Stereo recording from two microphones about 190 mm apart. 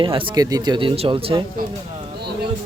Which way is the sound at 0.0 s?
25° right (ahead or behind).